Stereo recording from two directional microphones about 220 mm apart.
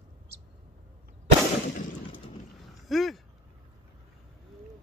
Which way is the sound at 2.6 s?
Centre (ahead or behind).